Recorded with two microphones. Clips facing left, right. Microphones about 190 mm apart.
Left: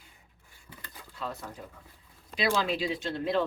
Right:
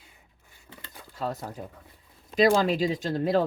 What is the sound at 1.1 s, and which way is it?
Speech, 40° right (ahead or behind).